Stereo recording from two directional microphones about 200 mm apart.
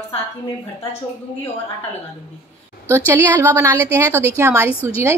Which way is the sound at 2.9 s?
15° right (ahead or behind).